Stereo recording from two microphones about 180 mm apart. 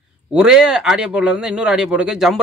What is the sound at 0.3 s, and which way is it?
Speech, 5° right (ahead or behind).